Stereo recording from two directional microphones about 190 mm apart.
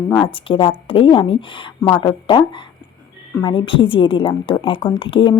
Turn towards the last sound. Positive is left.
turn(degrees=25)  # may be behind; listen again after turning